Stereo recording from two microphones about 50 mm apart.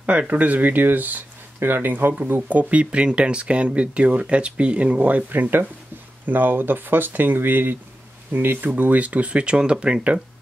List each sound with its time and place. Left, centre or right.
0.3 s speech: right
2.5 s speech: right